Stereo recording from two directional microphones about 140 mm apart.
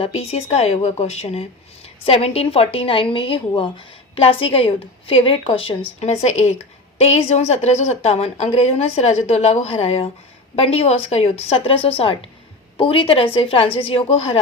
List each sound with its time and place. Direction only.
0.0 s a woman's voice: 45° left (ahead or behind)
6.0 s a woman's voice: 50° left (ahead or behind)